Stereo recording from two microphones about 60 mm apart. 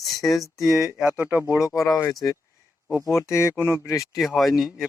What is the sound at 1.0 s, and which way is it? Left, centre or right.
Speech, right.